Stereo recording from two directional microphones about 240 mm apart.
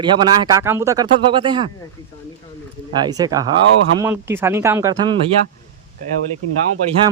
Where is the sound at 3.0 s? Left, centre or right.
Centre.